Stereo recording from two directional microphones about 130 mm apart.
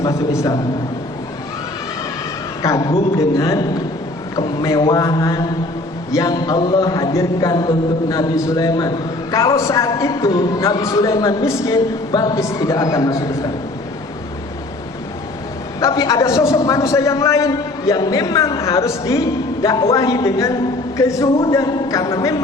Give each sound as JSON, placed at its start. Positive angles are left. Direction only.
{"t": 2.6, "sound": "a man's voice", "side_deg": 25}
{"t": 15.8, "sound": "a man's voice", "side_deg": 25}